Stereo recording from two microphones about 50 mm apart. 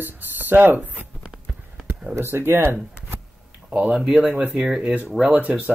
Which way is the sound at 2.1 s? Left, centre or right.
Right.